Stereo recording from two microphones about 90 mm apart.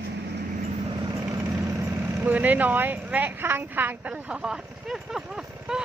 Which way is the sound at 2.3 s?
20° right (ahead or behind).